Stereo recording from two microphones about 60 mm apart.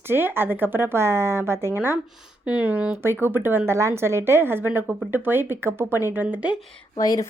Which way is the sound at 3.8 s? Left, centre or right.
Right.